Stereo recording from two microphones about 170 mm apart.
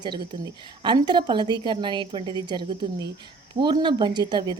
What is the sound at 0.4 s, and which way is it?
A woman's voice, 25° right (ahead or behind).